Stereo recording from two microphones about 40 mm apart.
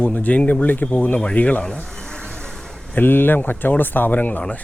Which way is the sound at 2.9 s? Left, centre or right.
Left.